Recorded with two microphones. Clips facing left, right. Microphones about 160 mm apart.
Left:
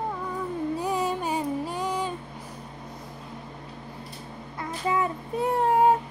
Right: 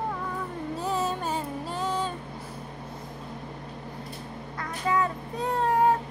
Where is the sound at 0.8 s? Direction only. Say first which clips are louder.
Right 3 dB; 15° left (ahead or behind).